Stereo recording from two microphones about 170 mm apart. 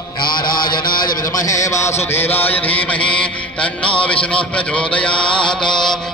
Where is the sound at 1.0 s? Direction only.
20° left (ahead or behind).